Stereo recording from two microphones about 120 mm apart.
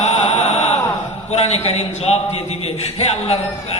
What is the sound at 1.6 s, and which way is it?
Speech, 60° left (ahead or behind).